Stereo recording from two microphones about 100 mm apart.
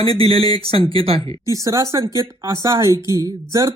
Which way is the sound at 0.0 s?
65° right (ahead or behind).